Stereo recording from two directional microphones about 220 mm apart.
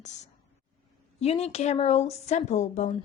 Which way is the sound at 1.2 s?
30° left (ahead or behind).